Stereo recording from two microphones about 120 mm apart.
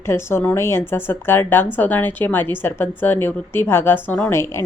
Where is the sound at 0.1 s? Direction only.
20° left (ahead or behind).